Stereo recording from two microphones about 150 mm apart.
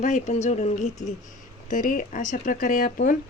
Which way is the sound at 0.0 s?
55° left (ahead or behind).